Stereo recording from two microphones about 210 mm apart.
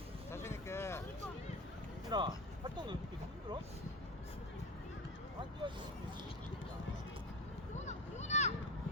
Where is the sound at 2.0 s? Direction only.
20° right (ahead or behind).